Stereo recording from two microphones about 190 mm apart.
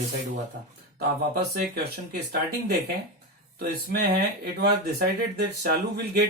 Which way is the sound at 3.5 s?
55° right (ahead or behind).